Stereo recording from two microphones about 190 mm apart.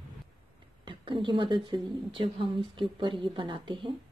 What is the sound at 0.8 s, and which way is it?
Speech, 25° right (ahead or behind).